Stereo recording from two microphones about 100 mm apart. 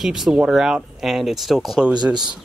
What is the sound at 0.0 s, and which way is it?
Speech, 5° right (ahead or behind).